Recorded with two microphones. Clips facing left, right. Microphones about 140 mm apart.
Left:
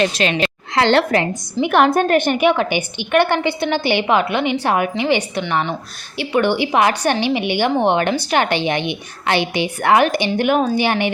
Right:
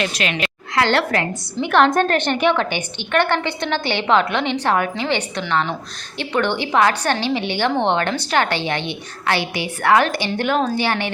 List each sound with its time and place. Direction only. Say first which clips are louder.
0.0 s a woman's voice: left 5 dB; 30° left (ahead or behind)
0.9 s a woman's voice: left 4 dB; 20° left (ahead or behind)